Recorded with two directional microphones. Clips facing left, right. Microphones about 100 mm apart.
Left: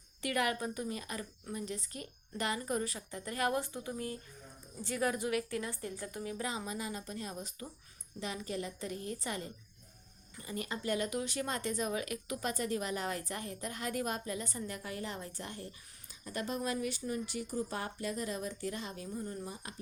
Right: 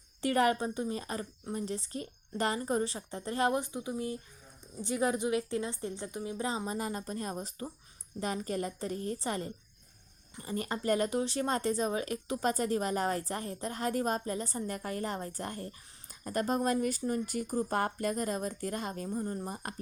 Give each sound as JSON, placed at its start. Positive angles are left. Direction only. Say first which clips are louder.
{"t": 0.2, "sound": "a woman's voice", "louder": "right 6 dB", "side_deg": -35}